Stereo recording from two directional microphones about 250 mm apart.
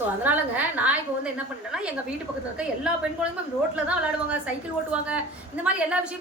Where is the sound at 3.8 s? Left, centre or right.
Centre.